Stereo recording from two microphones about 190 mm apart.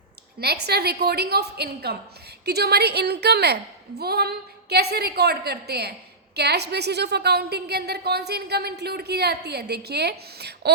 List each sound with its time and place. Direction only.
0.3 s a woman's voice: 60° right (ahead or behind)